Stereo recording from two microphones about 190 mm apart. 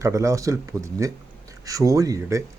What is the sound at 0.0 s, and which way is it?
A man's voice, 15° right (ahead or behind).